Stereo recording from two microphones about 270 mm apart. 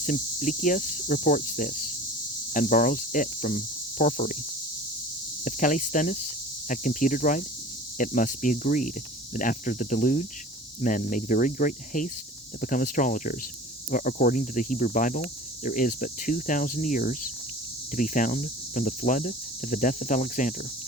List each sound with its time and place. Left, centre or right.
0.0 s speech: left
5.5 s speech: left